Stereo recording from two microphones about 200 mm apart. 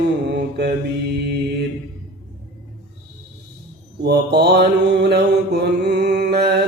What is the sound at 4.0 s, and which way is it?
Mantra, 55° right (ahead or behind).